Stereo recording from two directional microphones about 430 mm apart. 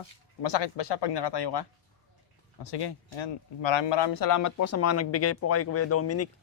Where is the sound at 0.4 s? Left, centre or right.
Left.